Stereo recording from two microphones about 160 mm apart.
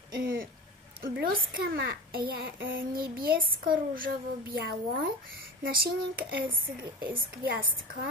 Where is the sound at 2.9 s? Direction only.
65° right (ahead or behind).